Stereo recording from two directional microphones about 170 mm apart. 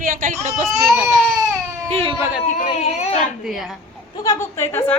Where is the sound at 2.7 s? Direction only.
40° left (ahead or behind).